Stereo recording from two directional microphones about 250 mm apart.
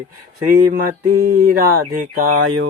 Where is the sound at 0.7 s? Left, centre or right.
Right.